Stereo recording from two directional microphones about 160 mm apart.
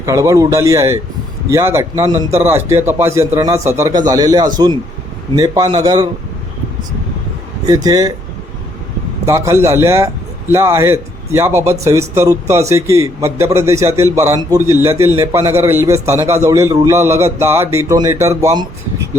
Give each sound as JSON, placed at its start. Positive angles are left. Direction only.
{"t": 0.0, "sound": "a man's voice", "side_deg": -20}
{"t": 7.7, "sound": "speech", "side_deg": -25}
{"t": 9.2, "sound": "a man's voice", "side_deg": -20}